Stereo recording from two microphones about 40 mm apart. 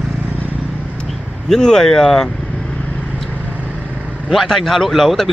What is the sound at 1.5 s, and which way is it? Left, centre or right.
Speech, centre.